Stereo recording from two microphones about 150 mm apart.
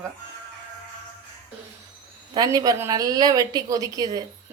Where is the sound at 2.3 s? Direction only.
25° right (ahead or behind).